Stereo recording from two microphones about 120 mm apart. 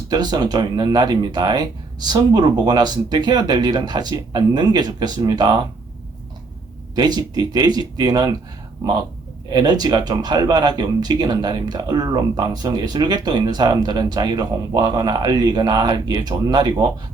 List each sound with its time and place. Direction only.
0.1 s speech: 35° right (ahead or behind)
6.9 s speech: 35° right (ahead or behind)
9.5 s speech: 35° right (ahead or behind)